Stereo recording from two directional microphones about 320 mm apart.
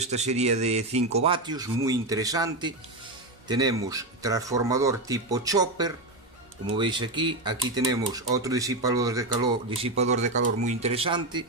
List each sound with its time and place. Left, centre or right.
0.0 s speech: right